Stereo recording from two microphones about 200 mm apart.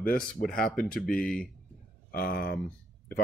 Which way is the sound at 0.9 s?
Centre (ahead or behind).